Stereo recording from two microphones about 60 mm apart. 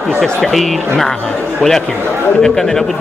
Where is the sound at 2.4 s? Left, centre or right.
Centre.